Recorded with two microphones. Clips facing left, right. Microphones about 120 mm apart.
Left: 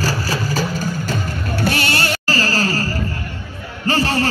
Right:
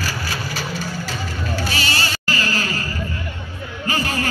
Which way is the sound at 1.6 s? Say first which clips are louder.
Left 6 dB; 55° left (ahead or behind).